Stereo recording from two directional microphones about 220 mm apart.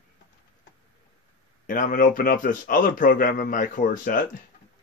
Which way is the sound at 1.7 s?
40° left (ahead or behind).